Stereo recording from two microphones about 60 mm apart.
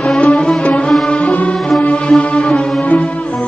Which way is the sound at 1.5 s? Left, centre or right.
Centre.